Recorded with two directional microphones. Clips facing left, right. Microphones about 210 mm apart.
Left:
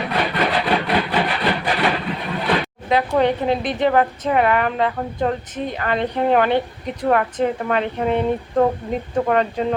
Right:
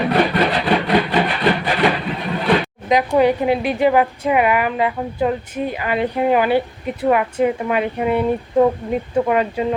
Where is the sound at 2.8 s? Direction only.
10° right (ahead or behind).